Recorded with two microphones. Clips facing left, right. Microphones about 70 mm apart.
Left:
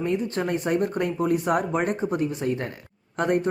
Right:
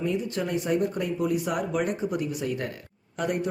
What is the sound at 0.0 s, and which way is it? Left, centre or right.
Speech, left.